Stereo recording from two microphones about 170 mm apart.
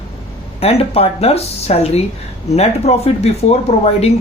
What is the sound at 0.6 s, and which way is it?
Speech, 35° left (ahead or behind).